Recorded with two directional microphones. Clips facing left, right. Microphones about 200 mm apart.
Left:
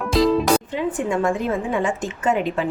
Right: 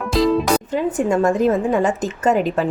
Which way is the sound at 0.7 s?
45° right (ahead or behind).